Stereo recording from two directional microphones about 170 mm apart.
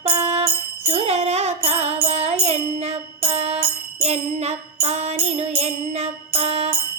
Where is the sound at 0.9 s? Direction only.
40° right (ahead or behind).